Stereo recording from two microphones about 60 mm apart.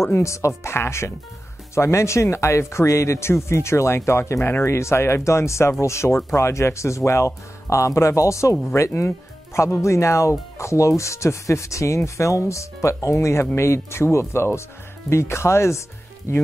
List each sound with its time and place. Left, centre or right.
0.0 s speech: left